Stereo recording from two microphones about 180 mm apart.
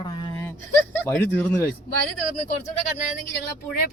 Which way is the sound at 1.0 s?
10° left (ahead or behind).